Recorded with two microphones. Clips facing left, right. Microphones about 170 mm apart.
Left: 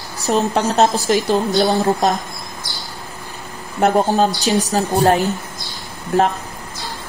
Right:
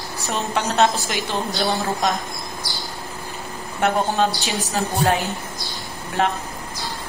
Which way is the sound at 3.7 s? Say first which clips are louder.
Left 5 dB; 40° left (ahead or behind).